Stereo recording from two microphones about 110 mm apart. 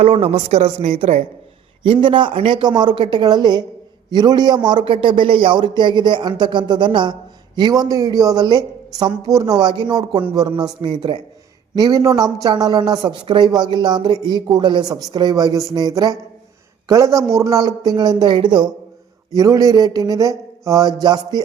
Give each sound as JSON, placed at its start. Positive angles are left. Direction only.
{"t": 0.0, "sound": "a woman's voice", "side_deg": -60}
{"t": 1.8, "sound": "a man's voice", "side_deg": -50}
{"t": 19.3, "sound": "speech", "side_deg": -30}